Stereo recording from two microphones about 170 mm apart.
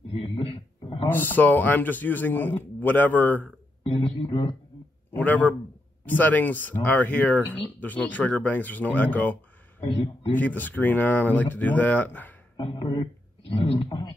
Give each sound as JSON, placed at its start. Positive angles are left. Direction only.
{"t": 0.1, "sound": "a sound", "side_deg": 30}
{"t": 1.0, "sound": "a man's voice", "side_deg": 10}
{"t": 3.8, "sound": "speech", "side_deg": 35}
{"t": 5.1, "sound": "a man's voice", "side_deg": 10}
{"t": 12.5, "sound": "a man's voice", "side_deg": 30}